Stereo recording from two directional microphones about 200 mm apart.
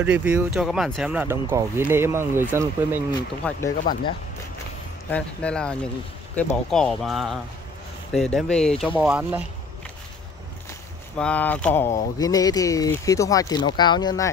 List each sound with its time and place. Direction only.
0.0 s speech: 5° right (ahead or behind)
3.4 s speech: 10° left (ahead or behind)
5.1 s speech: 5° left (ahead or behind)
8.9 s speech: 10° right (ahead or behind)
10.7 s speech: 5° left (ahead or behind)